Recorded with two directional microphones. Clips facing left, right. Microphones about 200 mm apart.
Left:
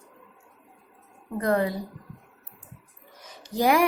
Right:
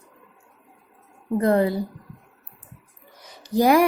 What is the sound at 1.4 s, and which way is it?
Speech, 30° right (ahead or behind).